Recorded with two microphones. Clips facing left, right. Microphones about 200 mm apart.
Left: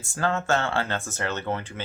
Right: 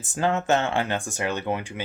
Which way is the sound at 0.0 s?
20° right (ahead or behind).